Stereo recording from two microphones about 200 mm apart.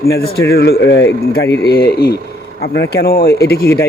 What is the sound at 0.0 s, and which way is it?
Speech, 50° left (ahead or behind).